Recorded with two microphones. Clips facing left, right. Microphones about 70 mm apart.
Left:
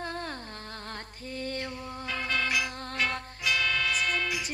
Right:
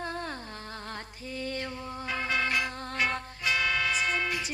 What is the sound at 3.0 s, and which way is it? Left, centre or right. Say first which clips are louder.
Music: right 1 dB; centre.